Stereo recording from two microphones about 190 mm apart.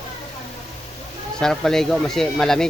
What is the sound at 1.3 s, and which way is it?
Speech, centre (ahead or behind).